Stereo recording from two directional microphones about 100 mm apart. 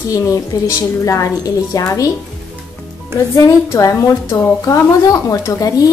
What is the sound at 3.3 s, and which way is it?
A woman's voice, 30° left (ahead or behind).